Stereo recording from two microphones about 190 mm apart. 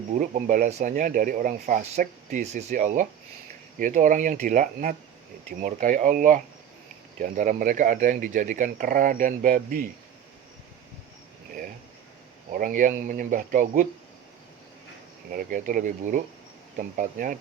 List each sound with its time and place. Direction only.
0.1 s speech: 40° right (ahead or behind)
12.5 s speech: 45° right (ahead or behind)
15.3 s speech: 45° right (ahead or behind)